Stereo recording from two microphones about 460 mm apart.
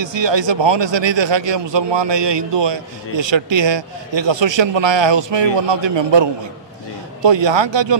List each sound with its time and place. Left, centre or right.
0.0 s a man's voice: right